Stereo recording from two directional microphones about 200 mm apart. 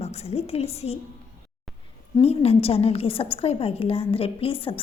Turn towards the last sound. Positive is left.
turn(degrees=25)  # may be behind; listen again after turning